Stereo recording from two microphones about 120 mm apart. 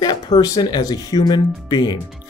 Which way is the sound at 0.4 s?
35° left (ahead or behind).